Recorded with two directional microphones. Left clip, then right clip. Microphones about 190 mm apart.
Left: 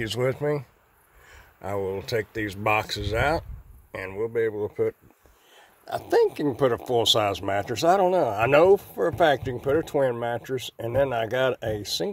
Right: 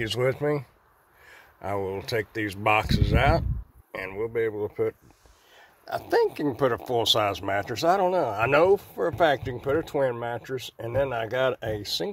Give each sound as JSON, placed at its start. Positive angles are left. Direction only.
{"t": 0.0, "sound": "speech", "side_deg": 5}